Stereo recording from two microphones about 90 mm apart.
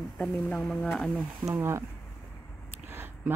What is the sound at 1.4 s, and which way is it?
Speech, 35° right (ahead or behind).